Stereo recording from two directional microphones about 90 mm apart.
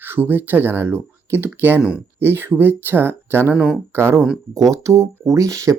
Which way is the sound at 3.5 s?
15° right (ahead or behind).